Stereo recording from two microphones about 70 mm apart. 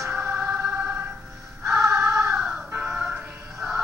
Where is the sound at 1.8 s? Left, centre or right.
Right.